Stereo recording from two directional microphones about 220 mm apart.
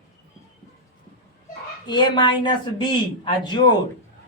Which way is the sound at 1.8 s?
20° left (ahead or behind).